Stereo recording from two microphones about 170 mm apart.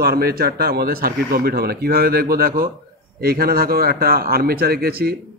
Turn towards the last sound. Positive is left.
turn(degrees=-65)  # may be behind; listen again after turning